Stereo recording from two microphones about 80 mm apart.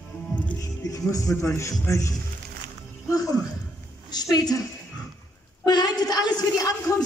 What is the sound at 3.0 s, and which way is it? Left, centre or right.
Music, left.